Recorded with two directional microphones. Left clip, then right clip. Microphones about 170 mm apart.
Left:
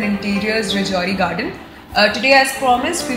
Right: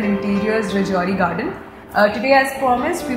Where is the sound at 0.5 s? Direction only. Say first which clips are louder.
Left 1 dB; 25° right (ahead or behind).